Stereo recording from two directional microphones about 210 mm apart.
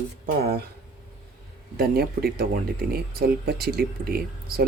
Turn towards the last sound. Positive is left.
turn(degrees=-45)  # may be behind; listen again after turning